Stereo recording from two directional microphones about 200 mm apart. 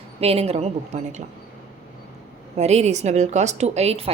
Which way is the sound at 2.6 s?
35° right (ahead or behind).